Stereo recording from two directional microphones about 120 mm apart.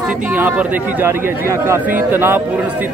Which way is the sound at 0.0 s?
15° right (ahead or behind).